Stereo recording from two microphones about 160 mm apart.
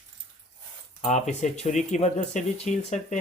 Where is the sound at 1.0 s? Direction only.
45° left (ahead or behind).